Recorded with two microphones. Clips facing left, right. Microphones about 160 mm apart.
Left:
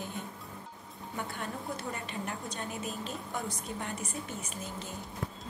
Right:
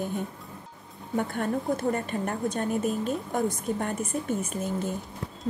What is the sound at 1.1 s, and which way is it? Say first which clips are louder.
A woman's voice: right 11 dB; 50° right (ahead or behind).